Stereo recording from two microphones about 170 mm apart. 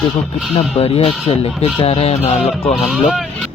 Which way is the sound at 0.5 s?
35° left (ahead or behind).